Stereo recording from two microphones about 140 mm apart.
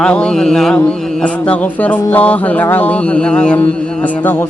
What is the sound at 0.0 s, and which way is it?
Mantra, 5° left (ahead or behind).